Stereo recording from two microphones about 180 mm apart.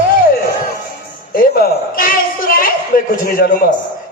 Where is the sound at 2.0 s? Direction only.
50° left (ahead or behind).